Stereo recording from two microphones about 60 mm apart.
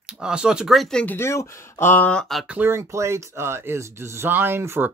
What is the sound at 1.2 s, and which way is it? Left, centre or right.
Speech, left.